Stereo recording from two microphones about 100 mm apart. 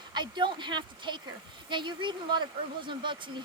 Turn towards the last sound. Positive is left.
turn(degrees=-55)  # may be behind; listen again after turning